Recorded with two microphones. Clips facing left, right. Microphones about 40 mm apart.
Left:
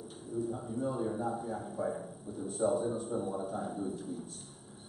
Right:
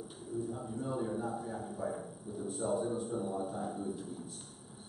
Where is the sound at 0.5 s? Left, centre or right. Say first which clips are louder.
Left 3 dB; centre.